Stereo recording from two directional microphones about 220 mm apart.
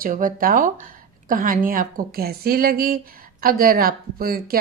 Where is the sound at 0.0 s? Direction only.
40° right (ahead or behind).